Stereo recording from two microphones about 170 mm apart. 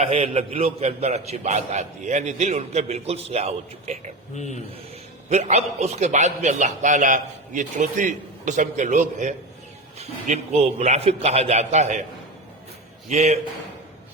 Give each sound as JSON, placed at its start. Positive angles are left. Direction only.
{"t": 0.0, "sound": "a man's voice", "side_deg": -35}
{"t": 4.4, "sound": "a man's voice", "side_deg": 45}
{"t": 5.3, "sound": "a man's voice", "side_deg": -40}
{"t": 13.1, "sound": "a man's voice", "side_deg": -40}